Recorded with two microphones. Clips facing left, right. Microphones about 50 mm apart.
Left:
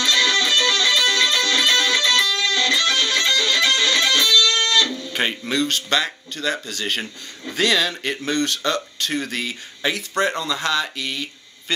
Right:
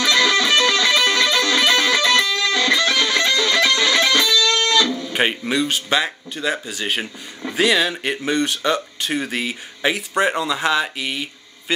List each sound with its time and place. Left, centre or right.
0.0 s music: right
5.1 s speech: centre